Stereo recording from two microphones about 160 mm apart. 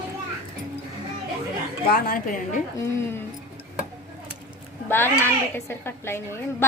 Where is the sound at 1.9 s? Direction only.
65° left (ahead or behind).